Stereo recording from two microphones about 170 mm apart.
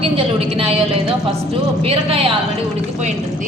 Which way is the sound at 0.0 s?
35° right (ahead or behind).